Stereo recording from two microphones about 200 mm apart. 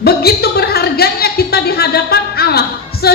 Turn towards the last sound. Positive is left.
turn(degrees=50)  # may be behind; listen again after turning